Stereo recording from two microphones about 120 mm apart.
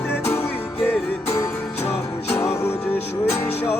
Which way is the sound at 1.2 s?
25° left (ahead or behind).